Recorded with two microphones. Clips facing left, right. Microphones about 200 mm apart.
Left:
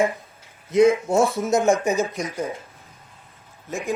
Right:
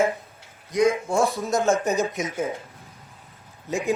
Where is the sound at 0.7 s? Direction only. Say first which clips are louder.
Left 4 dB; 25° left (ahead or behind).